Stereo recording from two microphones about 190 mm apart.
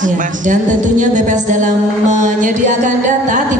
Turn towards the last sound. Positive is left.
turn(degrees=-40)  # may be behind; listen again after turning